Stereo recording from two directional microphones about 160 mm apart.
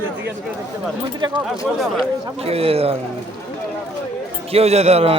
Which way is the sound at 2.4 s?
40° right (ahead or behind).